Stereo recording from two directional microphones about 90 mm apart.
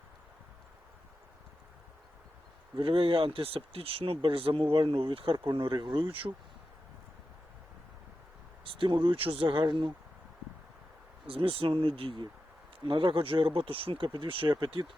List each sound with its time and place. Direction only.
2.7 s speech: 75° right (ahead or behind)
8.6 s speech: 75° right (ahead or behind)
9.4 s speech: 65° right (ahead or behind)
11.3 s speech: 90° right; by 14.8 s 65° right (ahead or behind)